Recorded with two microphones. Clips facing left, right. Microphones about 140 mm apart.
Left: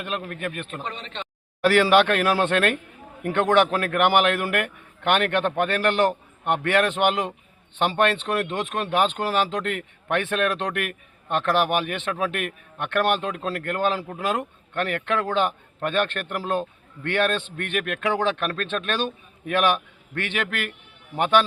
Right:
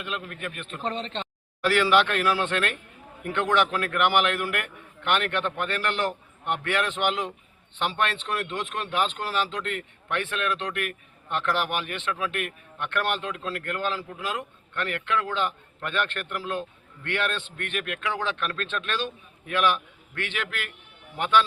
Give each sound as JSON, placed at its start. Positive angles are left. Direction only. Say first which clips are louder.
{"t": 0.0, "sound": "a man's voice", "louder": "left 4 dB", "side_deg": 50}
{"t": 0.9, "sound": "speech", "louder": "right 3 dB", "side_deg": -30}
{"t": 1.6, "sound": "a man's voice", "louder": "left 4 dB", "side_deg": 55}